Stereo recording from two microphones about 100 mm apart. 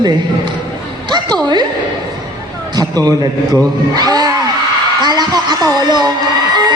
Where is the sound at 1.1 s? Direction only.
50° right (ahead or behind).